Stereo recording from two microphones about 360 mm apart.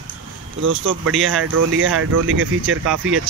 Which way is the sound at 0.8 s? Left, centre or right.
Right.